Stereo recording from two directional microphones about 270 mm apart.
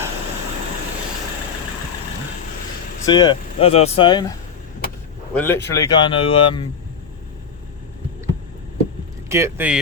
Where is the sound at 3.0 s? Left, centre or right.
Centre.